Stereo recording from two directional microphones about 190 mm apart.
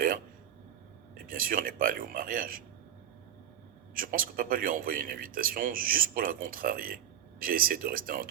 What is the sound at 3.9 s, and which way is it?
Speech, 50° right (ahead or behind).